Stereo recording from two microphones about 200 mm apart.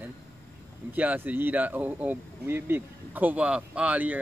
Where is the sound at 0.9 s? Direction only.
10° right (ahead or behind).